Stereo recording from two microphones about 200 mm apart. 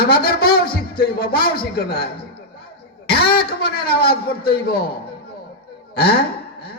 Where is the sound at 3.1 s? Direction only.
50° left (ahead or behind).